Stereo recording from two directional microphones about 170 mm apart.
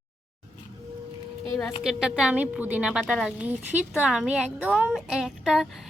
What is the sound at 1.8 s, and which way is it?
A woman's voice, 5° right (ahead or behind).